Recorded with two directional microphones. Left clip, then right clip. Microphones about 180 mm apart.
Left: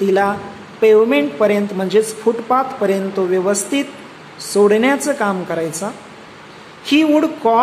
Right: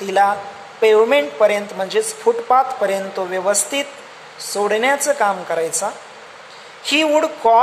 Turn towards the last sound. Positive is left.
turn(degrees=-20)  # may be behind; listen again after turning